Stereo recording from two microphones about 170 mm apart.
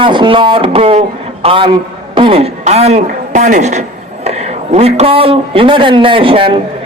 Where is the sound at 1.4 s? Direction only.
30° right (ahead or behind).